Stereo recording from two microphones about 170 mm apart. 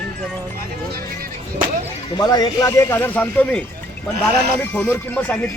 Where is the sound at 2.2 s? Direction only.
25° left (ahead or behind).